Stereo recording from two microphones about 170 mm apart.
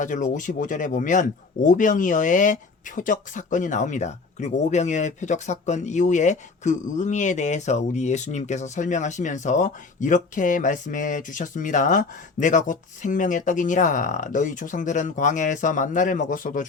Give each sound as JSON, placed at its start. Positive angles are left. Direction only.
{"t": 0.0, "sound": "speech", "side_deg": 45}